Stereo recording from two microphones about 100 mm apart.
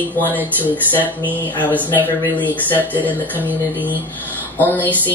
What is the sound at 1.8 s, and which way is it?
Music, 20° left (ahead or behind).